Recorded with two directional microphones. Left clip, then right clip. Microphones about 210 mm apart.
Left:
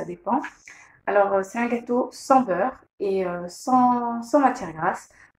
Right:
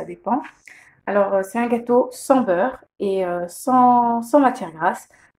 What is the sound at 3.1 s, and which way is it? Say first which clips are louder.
Speech: right 4 dB; 40° right (ahead or behind).